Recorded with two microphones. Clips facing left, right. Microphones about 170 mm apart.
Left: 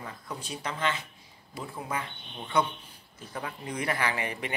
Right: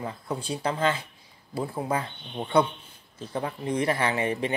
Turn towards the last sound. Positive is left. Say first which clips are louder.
# right 6 dB
turn(degrees=-25)  # may be behind; listen again after turning